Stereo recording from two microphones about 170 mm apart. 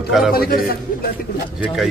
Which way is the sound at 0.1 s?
Centre (ahead or behind).